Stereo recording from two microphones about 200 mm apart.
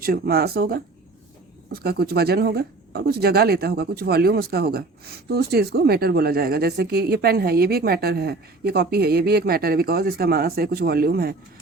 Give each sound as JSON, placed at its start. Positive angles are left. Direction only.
{"t": 0.0, "sound": "speech", "side_deg": -50}